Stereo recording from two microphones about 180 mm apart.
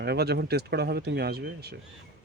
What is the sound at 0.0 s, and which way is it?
Speech, 65° right (ahead or behind).